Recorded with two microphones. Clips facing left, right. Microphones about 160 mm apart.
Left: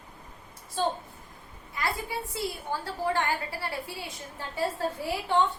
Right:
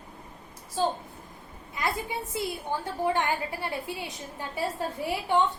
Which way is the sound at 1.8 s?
20° right (ahead or behind).